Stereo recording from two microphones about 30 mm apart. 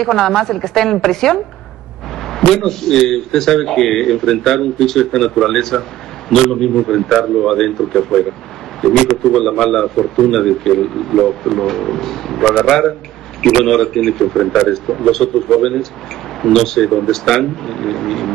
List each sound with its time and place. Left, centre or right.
0.0 s speech: centre
13.7 s speech: centre